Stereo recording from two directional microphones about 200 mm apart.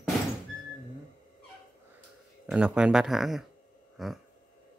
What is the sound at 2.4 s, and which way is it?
Speech, 5° right (ahead or behind).